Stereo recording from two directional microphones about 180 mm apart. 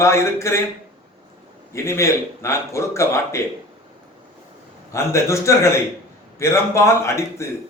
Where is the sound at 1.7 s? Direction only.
15° left (ahead or behind).